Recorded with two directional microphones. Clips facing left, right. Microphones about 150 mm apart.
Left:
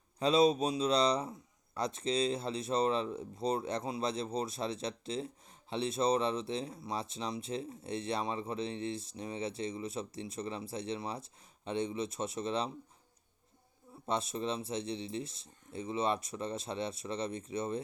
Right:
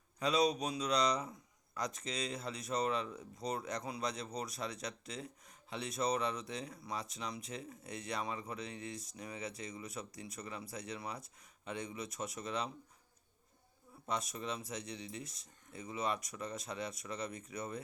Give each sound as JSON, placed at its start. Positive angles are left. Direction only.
{"t": 0.2, "sound": "a man's voice", "side_deg": 30}
{"t": 14.1, "sound": "a man's voice", "side_deg": 30}